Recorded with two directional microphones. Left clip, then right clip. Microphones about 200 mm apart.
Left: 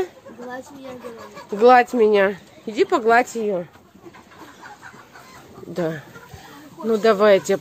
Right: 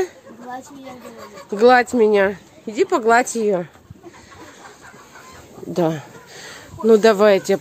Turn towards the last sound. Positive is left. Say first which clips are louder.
# right 1 dB
turn(degrees=-15)  # may be behind; listen again after turning